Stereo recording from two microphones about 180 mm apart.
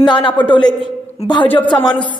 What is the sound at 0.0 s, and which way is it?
A man's voice, 25° left (ahead or behind).